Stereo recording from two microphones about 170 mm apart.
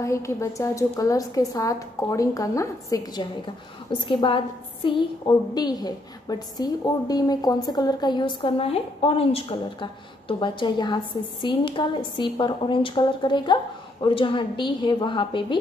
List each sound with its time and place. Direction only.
0.0 s a woman's voice: 15° left (ahead or behind)